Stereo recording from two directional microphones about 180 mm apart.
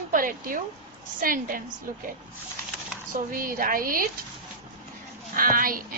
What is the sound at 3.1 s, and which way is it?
Speech, 50° right (ahead or behind).